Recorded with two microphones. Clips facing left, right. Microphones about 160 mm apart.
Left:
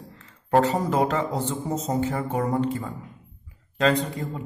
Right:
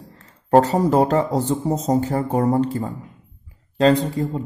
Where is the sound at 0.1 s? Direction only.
40° right (ahead or behind).